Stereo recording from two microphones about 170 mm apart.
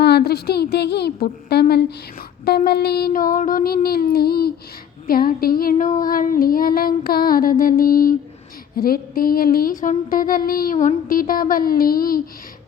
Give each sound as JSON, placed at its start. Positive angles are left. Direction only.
{"t": 0.0, "sound": "a woman's voice", "side_deg": 70}
{"t": 2.4, "sound": "female singing", "side_deg": 65}
{"t": 5.7, "sound": "female singing", "side_deg": 45}